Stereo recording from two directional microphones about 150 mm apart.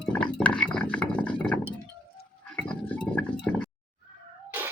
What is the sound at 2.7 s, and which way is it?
Chink, 10° left (ahead or behind).